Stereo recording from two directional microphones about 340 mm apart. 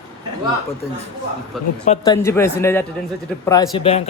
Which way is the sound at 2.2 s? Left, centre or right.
Centre.